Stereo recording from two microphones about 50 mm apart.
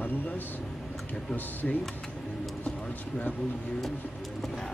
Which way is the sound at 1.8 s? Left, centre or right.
Centre.